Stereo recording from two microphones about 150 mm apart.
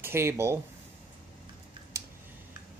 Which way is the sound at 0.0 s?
15° right (ahead or behind).